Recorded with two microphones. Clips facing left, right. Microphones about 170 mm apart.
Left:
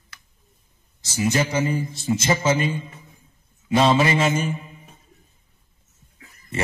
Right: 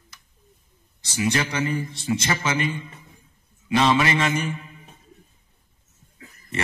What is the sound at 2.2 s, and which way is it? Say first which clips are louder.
Speech: left 8 dB; 25° left (ahead or behind).